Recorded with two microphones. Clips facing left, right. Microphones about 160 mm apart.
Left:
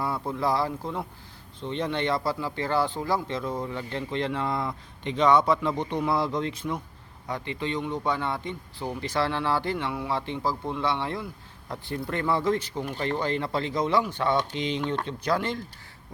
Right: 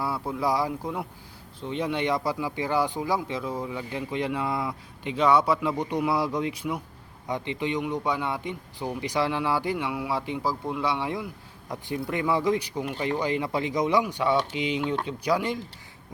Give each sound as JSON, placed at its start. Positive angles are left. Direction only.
{"t": 0.0, "sound": "speech", "side_deg": -5}